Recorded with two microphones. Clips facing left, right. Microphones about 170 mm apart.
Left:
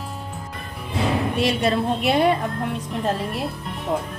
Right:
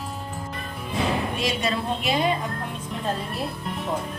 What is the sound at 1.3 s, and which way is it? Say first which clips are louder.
A woman's voice: left 5 dB; 60° left (ahead or behind).